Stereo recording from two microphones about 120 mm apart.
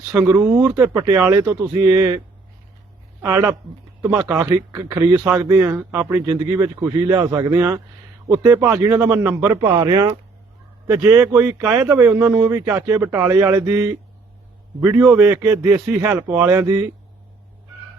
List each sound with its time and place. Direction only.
0.3 s speech: 25° right (ahead or behind)